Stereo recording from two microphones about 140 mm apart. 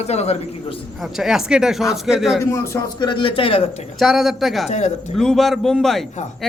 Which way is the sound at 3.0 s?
35° left (ahead or behind).